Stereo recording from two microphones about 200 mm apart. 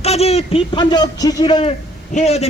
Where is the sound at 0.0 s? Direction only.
30° left (ahead or behind).